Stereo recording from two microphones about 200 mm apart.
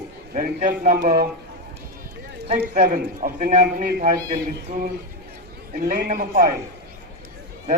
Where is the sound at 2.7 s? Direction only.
40° right (ahead or behind).